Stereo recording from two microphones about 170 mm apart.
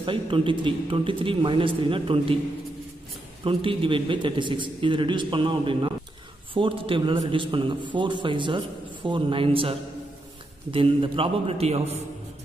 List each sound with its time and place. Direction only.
0.0 s speech: 30° right (ahead or behind)
3.4 s a man's voice: 30° right (ahead or behind)